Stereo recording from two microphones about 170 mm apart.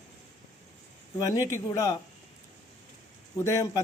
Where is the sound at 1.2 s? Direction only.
20° left (ahead or behind).